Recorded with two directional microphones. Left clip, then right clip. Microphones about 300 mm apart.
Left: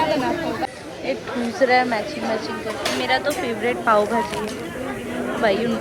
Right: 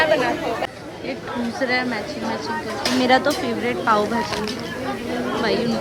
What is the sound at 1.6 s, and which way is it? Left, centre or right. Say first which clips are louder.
Speech: left 5 dB; centre.